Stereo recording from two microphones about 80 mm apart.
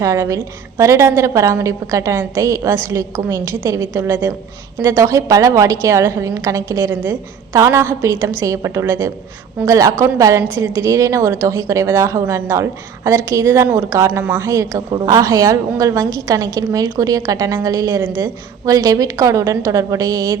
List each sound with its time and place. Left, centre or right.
0.0 s a woman's voice: right